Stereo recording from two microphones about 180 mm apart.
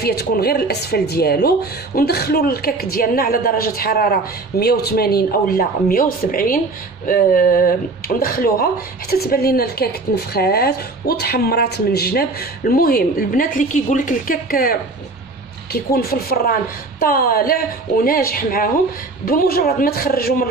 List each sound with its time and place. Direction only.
0.0 s a woman's voice: 65° left (ahead or behind)